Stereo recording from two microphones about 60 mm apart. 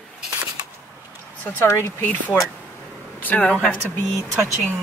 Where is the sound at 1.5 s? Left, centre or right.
Left.